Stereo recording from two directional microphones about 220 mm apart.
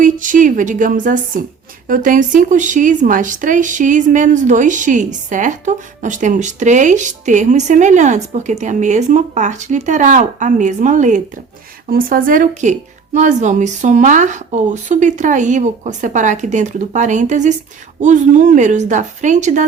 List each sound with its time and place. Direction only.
0.0 s a woman's voice: 35° right (ahead or behind)